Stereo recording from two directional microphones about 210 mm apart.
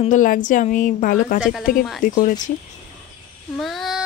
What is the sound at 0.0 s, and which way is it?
A woman's voice, 40° left (ahead or behind).